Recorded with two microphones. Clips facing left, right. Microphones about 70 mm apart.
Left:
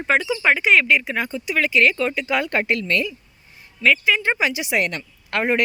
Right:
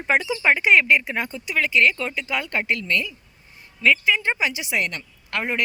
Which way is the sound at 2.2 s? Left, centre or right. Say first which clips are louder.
Left 4 dB; left.